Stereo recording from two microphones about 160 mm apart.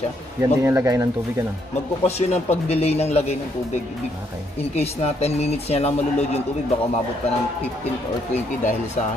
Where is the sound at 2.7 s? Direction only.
40° left (ahead or behind).